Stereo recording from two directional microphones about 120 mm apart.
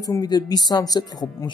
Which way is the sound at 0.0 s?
30° left (ahead or behind).